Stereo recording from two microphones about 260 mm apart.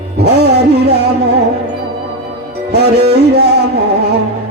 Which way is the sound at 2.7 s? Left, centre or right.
Right.